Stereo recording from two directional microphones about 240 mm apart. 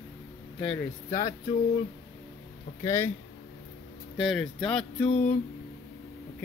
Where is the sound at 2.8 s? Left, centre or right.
Centre.